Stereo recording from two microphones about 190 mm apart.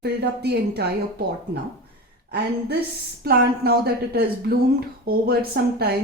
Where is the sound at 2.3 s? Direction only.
60° right (ahead or behind).